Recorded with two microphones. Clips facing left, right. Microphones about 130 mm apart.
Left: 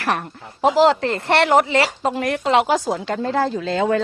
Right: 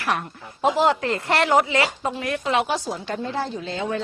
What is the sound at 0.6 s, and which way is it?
Speech, 75° left (ahead or behind).